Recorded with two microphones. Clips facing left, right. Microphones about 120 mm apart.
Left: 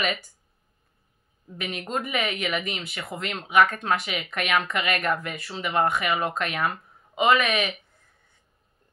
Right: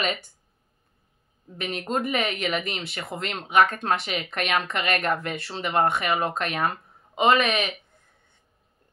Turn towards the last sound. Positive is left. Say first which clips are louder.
# right 1 dB
turn(degrees=-25)  # may be behind; listen again after turning